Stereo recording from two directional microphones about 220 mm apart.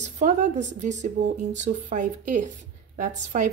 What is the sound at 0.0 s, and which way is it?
A woman's voice, 35° right (ahead or behind).